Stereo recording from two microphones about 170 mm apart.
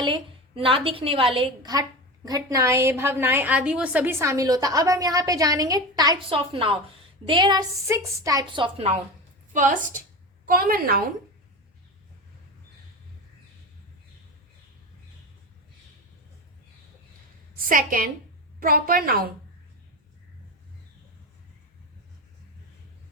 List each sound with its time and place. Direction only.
0.0 s a woman's voice: 30° right (ahead or behind)
9.5 s a woman's voice: 50° right (ahead or behind)
10.4 s a woman's voice: 60° right (ahead or behind)
17.7 s a woman's voice: 55° right (ahead or behind)